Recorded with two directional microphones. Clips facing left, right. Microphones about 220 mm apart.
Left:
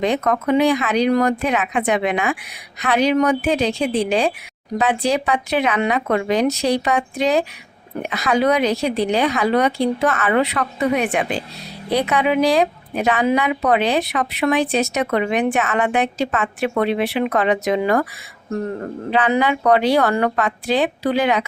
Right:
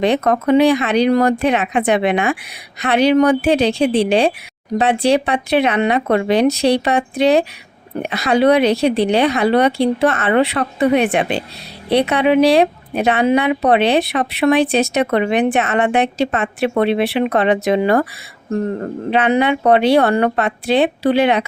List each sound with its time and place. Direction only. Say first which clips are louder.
0.0 s a woman's voice: right 4 dB; 30° right (ahead or behind)
3.8 s speech: right 5 dB; 75° right (ahead or behind)
4.8 s a woman's voice: right 4 dB; 30° right (ahead or behind)
19.1 s a woman's voice: right 3 dB; 25° right (ahead or behind)